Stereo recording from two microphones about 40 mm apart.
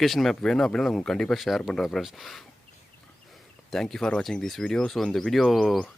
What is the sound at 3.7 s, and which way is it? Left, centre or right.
Speech, centre.